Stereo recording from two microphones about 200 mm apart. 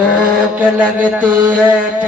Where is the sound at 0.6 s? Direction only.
5° right (ahead or behind).